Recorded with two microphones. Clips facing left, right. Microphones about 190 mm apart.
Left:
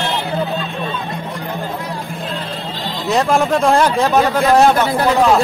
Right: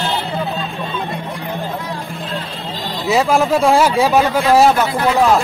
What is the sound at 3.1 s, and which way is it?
A man's voice, centre (ahead or behind).